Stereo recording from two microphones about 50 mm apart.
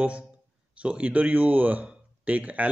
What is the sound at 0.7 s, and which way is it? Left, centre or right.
Speech, right.